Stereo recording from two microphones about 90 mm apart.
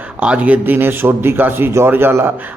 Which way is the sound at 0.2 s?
15° right (ahead or behind).